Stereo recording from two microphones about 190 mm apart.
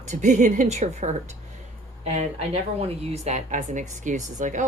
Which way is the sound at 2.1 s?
30° right (ahead or behind).